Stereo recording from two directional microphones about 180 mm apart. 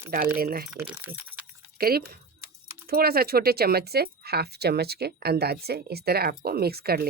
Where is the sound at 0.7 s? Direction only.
10° right (ahead or behind).